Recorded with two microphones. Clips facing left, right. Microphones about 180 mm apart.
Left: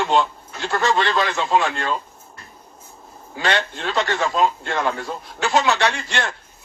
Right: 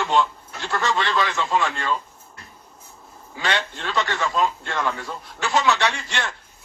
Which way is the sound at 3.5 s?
55° left (ahead or behind).